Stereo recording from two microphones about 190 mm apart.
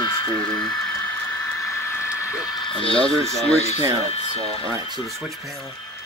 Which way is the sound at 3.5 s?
35° left (ahead or behind).